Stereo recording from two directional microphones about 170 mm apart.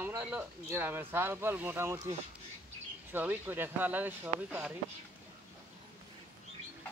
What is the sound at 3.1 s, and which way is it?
Speech, 10° right (ahead or behind).